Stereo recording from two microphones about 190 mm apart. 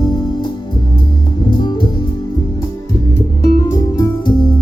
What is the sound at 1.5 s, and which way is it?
Music, 25° left (ahead or behind).